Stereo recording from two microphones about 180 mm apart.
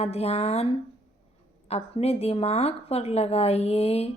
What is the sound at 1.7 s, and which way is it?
A woman's voice, 35° left (ahead or behind).